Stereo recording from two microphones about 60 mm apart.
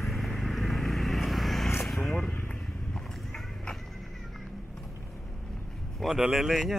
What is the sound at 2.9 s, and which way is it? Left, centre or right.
Horse, centre.